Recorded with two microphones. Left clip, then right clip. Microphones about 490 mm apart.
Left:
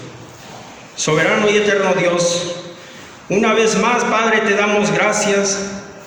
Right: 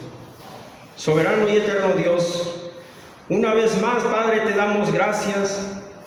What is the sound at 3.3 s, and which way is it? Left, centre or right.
A man's voice, centre.